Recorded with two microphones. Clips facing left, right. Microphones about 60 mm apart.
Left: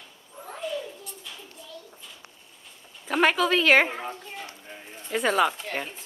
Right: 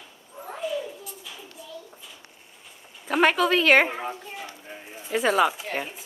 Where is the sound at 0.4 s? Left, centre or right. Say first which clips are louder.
Right 3 dB; centre.